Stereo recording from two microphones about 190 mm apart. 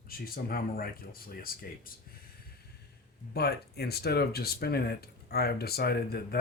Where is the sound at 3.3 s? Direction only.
55° left (ahead or behind).